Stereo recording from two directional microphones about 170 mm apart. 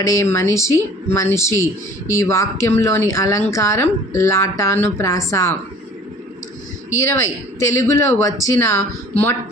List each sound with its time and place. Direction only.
0.0 s speech: 20° left (ahead or behind)
6.9 s speech: 15° left (ahead or behind)